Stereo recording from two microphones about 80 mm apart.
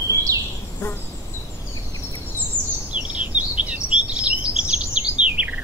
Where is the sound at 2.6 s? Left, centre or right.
Left.